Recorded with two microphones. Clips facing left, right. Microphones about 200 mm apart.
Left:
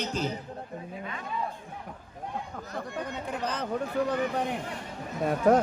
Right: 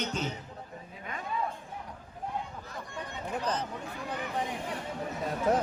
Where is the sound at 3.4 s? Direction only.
65° left (ahead or behind).